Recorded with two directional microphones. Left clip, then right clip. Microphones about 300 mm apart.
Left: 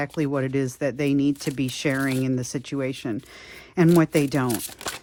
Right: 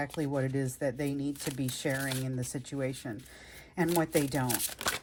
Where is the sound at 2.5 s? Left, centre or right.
Centre.